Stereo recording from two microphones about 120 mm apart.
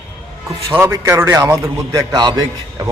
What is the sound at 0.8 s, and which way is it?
A man's voice, 20° right (ahead or behind).